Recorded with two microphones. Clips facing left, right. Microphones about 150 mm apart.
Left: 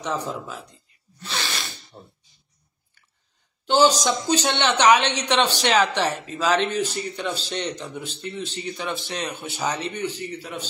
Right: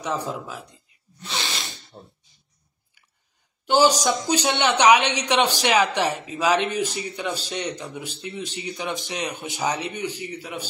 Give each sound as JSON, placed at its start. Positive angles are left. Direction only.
{"t": 0.0, "sound": "snort", "side_deg": -10}
{"t": 3.6, "sound": "speech", "side_deg": -10}